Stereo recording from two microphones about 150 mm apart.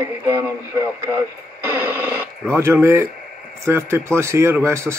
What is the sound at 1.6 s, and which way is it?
Radio, 10° right (ahead or behind).